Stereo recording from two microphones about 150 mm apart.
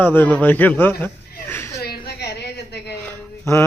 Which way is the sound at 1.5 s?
15° left (ahead or behind).